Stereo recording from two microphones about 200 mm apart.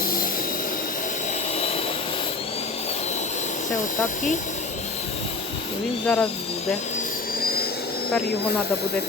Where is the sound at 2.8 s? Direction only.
35° left (ahead or behind).